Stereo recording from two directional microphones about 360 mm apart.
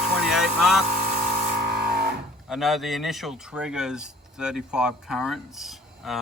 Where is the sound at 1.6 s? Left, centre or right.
Right.